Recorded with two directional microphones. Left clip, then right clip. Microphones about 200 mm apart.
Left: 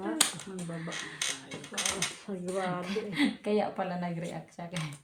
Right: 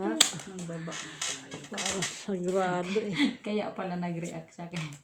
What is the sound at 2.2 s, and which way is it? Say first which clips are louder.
Speech: right 5 dB; 65° right (ahead or behind).